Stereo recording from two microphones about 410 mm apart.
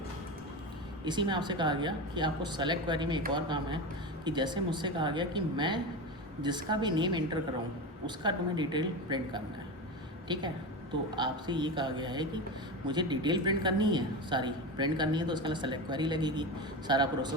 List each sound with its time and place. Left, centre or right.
1.0 s a woman's voice: centre